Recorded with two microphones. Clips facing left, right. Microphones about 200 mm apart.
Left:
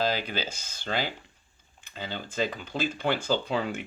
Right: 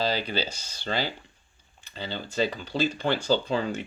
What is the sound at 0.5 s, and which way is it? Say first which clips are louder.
Speech: right 1 dB; 50° left (ahead or behind).